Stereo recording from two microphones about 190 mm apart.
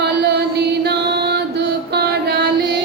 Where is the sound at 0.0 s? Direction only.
60° right (ahead or behind).